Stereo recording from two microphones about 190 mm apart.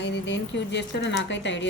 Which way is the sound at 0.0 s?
70° left (ahead or behind).